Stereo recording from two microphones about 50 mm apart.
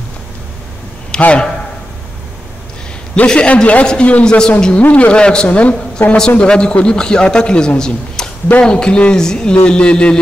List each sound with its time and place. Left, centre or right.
1.2 s a man's voice: left
3.3 s a man's voice: left